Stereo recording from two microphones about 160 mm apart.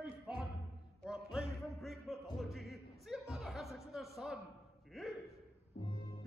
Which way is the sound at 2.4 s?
Centre (ahead or behind).